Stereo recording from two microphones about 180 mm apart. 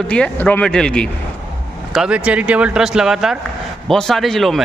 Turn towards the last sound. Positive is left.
turn(degrees=0)  # may be behind; listen again after turning